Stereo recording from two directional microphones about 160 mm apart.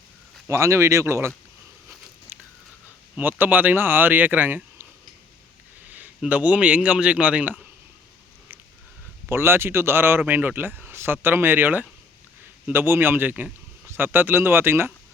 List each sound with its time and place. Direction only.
0.4 s speech: 20° right (ahead or behind)
3.2 s speech: 10° right (ahead or behind)
5.9 s speech: 10° right (ahead or behind)
9.3 s speech: 15° right (ahead or behind)